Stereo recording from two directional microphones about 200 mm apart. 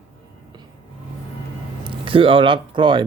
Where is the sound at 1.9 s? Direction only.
25° right (ahead or behind).